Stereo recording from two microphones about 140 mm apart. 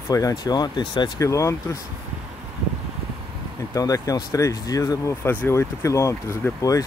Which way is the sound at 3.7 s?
25° left (ahead or behind).